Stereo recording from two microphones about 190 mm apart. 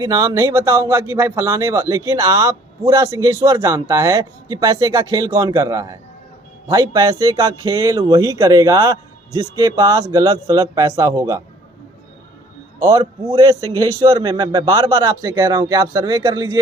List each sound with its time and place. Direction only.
0.0 s a man's voice: 15° right (ahead or behind)
13.0 s a man's voice: 25° right (ahead or behind)